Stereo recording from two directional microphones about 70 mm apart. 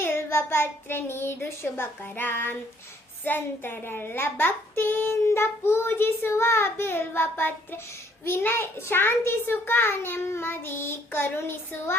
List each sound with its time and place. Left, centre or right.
0.0 s a child's voice: left